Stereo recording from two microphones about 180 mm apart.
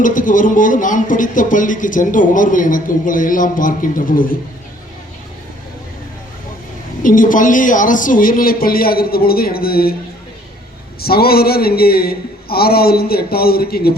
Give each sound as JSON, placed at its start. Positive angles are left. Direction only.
{"t": 0.0, "sound": "a man's voice", "side_deg": 45}
{"t": 7.0, "sound": "a man's voice", "side_deg": 50}
{"t": 11.0, "sound": "a man's voice", "side_deg": 60}